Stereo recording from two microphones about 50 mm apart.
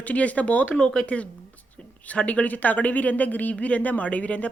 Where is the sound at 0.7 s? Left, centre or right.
Centre.